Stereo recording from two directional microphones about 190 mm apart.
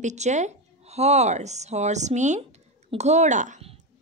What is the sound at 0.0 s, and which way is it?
A woman's voice, 40° right (ahead or behind).